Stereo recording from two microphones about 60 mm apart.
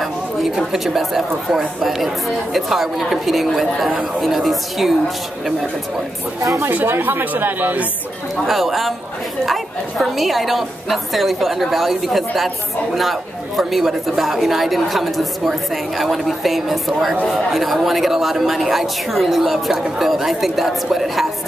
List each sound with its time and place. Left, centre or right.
0.0 s speech: centre
6.6 s speech: right
8.5 s speech: centre